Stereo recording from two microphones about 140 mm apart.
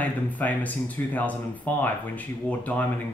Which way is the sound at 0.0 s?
10° left (ahead or behind).